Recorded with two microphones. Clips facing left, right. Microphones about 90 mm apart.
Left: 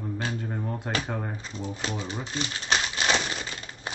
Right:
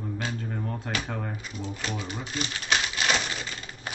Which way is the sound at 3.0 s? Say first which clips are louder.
Left 2 dB; 25° left (ahead or behind).